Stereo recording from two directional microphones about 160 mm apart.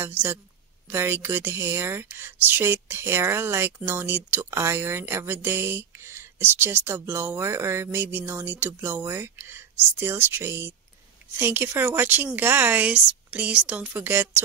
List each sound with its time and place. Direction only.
0.0 s a woman's voice: 10° right (ahead or behind)